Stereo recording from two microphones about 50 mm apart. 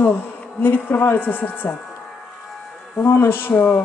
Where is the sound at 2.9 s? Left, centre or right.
Left.